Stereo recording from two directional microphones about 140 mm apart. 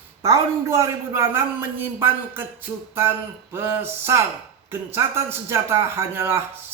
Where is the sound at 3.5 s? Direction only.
15° right (ahead or behind).